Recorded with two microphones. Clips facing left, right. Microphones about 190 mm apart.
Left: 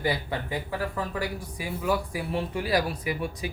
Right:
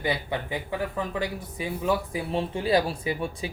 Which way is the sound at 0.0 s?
20° right (ahead or behind).